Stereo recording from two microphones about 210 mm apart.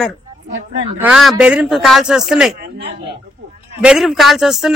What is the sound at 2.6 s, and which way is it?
Speech, 50° right (ahead or behind).